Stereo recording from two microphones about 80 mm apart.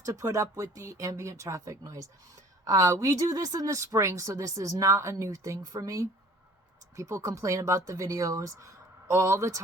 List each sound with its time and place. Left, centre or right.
0.0 s speech: right